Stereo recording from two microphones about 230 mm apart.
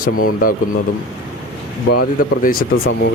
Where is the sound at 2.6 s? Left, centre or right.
Left.